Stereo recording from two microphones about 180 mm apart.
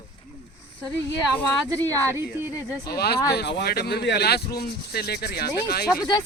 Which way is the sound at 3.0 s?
60° left (ahead or behind).